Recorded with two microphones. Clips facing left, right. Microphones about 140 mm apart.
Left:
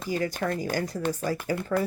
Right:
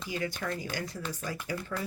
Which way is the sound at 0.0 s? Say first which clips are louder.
Left 6 dB; 45° left (ahead or behind).